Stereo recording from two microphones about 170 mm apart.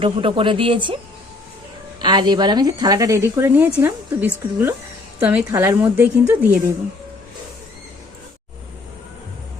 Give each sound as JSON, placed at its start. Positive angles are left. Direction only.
{"t": 0.0, "sound": "speech", "side_deg": -30}
{"t": 2.0, "sound": "a woman's voice", "side_deg": -25}